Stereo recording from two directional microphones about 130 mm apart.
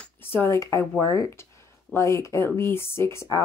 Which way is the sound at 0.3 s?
20° left (ahead or behind).